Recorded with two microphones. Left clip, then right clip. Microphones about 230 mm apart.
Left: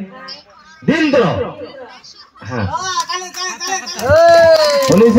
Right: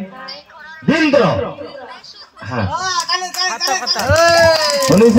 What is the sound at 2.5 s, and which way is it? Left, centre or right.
A child's voice, centre.